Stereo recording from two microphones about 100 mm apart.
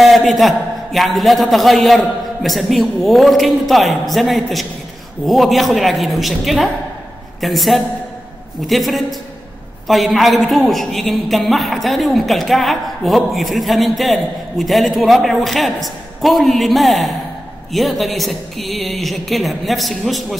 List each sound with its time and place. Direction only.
0.0 s a woman's voice: centre (ahead or behind)